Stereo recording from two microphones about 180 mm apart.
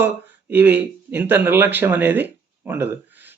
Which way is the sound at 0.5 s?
10° right (ahead or behind).